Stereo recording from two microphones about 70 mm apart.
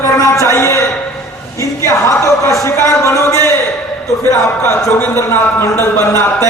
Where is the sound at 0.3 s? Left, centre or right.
Left.